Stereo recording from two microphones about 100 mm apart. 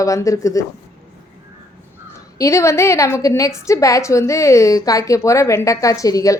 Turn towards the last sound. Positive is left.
turn(degrees=35)  # may be behind; listen again after turning